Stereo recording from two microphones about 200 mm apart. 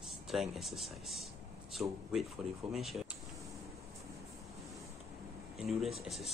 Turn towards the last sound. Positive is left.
turn(degrees=0)  # may be behind; listen again after turning